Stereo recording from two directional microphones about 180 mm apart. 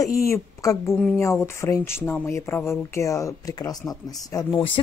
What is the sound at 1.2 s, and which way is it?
Speech, 15° left (ahead or behind).